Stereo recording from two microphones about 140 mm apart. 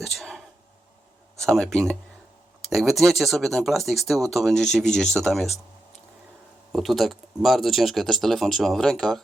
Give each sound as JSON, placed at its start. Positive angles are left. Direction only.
{"t": 0.2, "sound": "a sound", "side_deg": 5}
{"t": 1.4, "sound": "speech", "side_deg": 5}
{"t": 6.7, "sound": "speech", "side_deg": 0}